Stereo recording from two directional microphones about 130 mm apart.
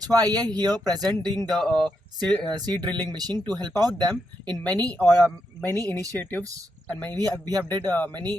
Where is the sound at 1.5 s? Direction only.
5° left (ahead or behind).